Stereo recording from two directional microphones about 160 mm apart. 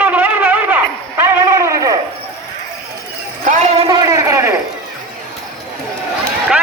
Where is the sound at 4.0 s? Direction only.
20° right (ahead or behind).